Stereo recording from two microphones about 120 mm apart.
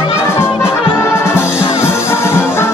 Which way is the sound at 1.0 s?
20° left (ahead or behind).